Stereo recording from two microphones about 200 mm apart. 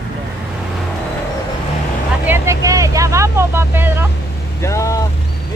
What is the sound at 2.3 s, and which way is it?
Speech, 15° right (ahead or behind).